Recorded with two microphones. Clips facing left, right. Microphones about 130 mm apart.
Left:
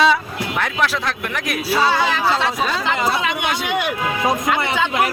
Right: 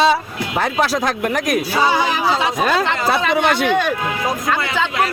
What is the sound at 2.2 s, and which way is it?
Speech, centre (ahead or behind).